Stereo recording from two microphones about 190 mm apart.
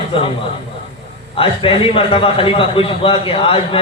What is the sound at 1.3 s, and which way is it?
A man's voice, 30° left (ahead or behind).